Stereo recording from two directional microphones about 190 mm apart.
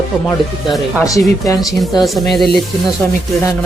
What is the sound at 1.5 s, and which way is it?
Speech, centre (ahead or behind).